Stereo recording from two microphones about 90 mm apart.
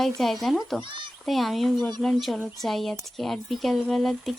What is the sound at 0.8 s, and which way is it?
Speech, 65° right (ahead or behind).